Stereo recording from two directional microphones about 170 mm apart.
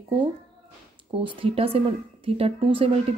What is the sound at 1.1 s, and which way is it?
A child's voice, 30° right (ahead or behind).